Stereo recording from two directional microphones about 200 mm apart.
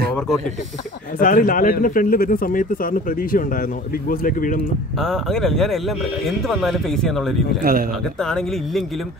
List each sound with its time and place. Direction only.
1.2 s speech: 45° left (ahead or behind)
5.0 s speech: centre (ahead or behind)
7.7 s speech: 50° right (ahead or behind)
8.2 s speech: 5° left (ahead or behind)